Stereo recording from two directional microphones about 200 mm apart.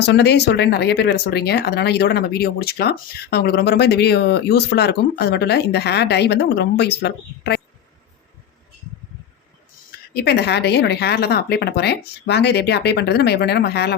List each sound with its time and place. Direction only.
0.0 s speech: 55° left (ahead or behind)
10.2 s speech: 55° left (ahead or behind)